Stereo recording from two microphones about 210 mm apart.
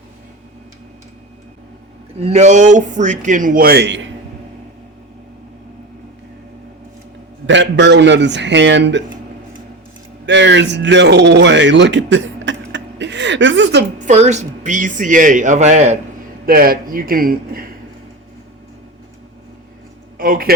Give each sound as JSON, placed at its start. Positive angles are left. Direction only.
{"t": 2.2, "sound": "speech", "side_deg": -30}
{"t": 7.4, "sound": "a man's voice", "side_deg": -60}
{"t": 10.2, "sound": "speech", "side_deg": -60}
{"t": 14.0, "sound": "speech", "side_deg": -35}
{"t": 16.5, "sound": "a man's voice", "side_deg": -45}
{"t": 20.1, "sound": "speech", "side_deg": -45}